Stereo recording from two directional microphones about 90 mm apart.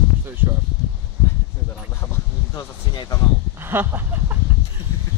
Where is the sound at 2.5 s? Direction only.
50° left (ahead or behind).